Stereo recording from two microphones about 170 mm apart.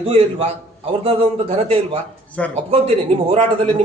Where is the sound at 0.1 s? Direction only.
35° right (ahead or behind).